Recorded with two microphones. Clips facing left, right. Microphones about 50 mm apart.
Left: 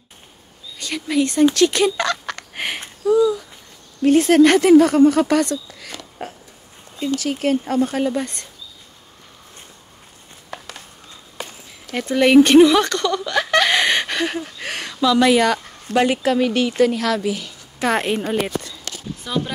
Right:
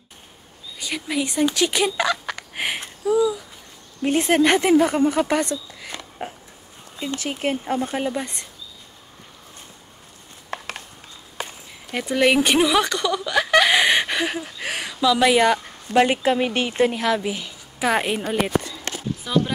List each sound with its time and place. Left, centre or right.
0.7 s speech: centre
1.5 s a sound: centre
4.0 s speech: centre
7.1 s speech: right
10.5 s a sound: right
11.9 s speech: centre
17.7 s a woman's voice: centre
19.2 s speech: centre